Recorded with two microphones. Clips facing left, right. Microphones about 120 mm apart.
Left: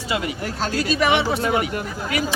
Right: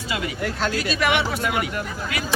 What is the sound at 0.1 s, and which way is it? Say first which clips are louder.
Speech: left 1 dB; 35° left (ahead or behind).